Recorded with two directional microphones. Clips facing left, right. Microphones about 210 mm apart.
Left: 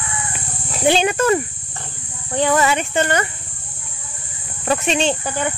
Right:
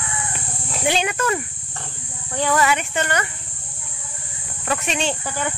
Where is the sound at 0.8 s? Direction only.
30° left (ahead or behind).